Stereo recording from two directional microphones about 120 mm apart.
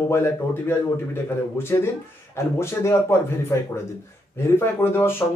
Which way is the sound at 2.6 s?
20° left (ahead or behind).